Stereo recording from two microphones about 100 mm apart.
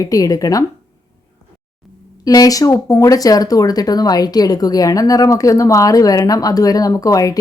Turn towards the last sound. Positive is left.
turn(degrees=35)  # may be behind; listen again after turning